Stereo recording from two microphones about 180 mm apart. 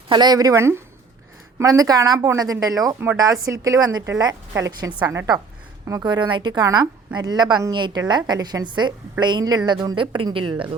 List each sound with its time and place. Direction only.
0.1 s a woman's voice: 25° right (ahead or behind)